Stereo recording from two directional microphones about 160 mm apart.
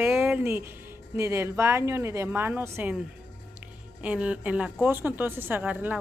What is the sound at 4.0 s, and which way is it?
A woman's voice, 10° right (ahead or behind).